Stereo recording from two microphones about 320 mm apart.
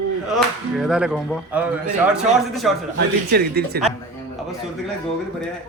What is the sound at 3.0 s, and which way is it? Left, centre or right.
Speech, right.